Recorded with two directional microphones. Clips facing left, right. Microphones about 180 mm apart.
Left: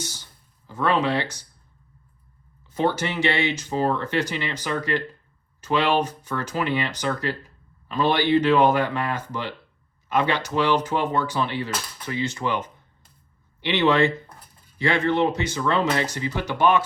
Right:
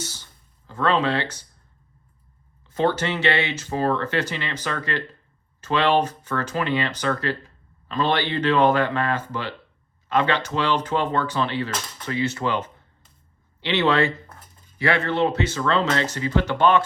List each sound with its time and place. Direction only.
0.7 s speech: 10° left (ahead or behind)
2.7 s speech: 10° left (ahead or behind)
13.6 s speech: 15° left (ahead or behind)